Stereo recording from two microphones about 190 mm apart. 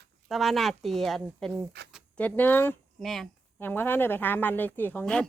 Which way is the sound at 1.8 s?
60° right (ahead or behind).